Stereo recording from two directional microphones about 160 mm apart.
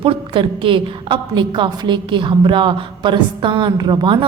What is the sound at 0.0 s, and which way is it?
A woman's voice, 35° right (ahead or behind).